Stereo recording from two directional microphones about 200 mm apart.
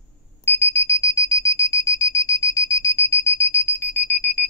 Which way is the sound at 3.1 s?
15° left (ahead or behind).